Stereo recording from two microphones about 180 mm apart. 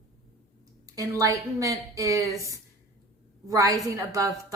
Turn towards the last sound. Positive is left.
turn(degrees=-20)  # may be behind; listen again after turning